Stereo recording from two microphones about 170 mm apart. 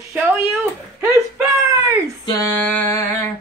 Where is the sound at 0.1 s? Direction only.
5° right (ahead or behind).